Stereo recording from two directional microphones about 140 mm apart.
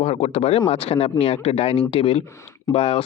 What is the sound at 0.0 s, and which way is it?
Speech, 45° left (ahead or behind).